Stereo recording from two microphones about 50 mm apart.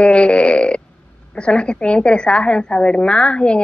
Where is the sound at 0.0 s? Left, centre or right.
Left.